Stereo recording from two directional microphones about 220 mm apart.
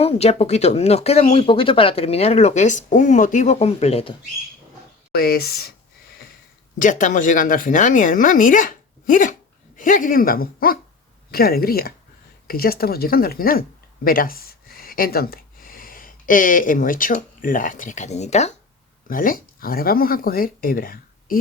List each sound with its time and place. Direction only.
0.0 s speech: 30° left (ahead or behind)
5.1 s speech: 45° left (ahead or behind)
6.7 s speech: 35° left (ahead or behind)